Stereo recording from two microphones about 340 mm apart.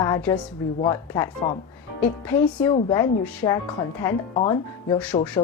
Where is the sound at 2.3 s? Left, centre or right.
Centre.